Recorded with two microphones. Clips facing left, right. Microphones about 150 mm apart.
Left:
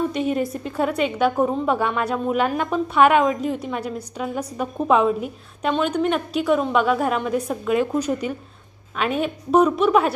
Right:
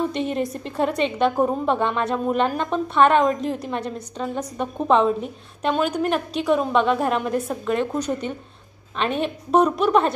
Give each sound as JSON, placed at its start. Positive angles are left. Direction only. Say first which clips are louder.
{"t": 0.1, "sound": "a woman's voice", "louder": "left 2 dB", "side_deg": 5}